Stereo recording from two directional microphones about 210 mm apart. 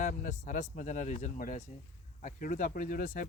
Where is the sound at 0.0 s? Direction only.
35° left (ahead or behind).